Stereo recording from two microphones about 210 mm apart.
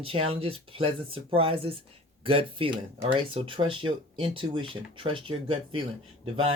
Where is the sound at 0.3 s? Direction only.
25° right (ahead or behind).